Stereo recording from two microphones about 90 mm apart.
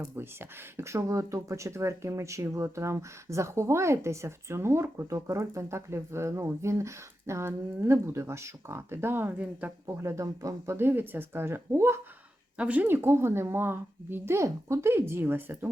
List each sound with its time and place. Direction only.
0.0 s speech: 30° right (ahead or behind)
9.8 s a woman's voice: 30° right (ahead or behind)
12.5 s a woman's voice: 15° right (ahead or behind)